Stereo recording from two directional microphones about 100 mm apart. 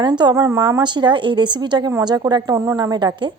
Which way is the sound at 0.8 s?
50° right (ahead or behind).